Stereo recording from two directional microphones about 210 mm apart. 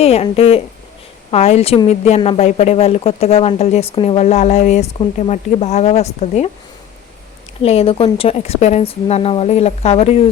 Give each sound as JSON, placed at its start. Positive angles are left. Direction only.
{"t": 0.0, "sound": "speech", "side_deg": 30}
{"t": 7.6, "sound": "speech", "side_deg": 30}